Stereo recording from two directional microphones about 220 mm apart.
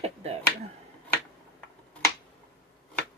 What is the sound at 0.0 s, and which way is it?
Finger snapping, 30° right (ahead or behind).